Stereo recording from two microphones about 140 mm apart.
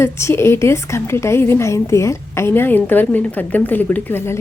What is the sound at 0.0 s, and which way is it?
A woman's voice, 20° left (ahead or behind).